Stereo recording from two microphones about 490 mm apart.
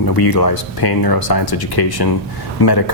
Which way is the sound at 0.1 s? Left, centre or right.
Left.